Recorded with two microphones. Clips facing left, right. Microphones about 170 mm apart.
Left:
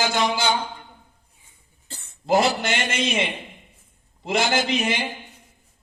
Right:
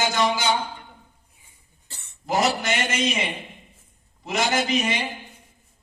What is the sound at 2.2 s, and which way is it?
Speech, 30° left (ahead or behind).